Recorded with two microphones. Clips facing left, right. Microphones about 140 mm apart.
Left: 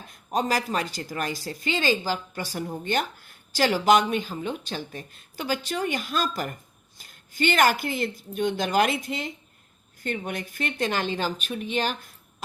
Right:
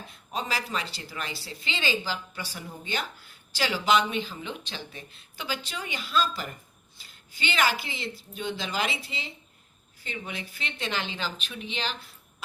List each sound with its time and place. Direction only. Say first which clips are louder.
0.1 s a woman's voice: left 7 dB; 45° left (ahead or behind)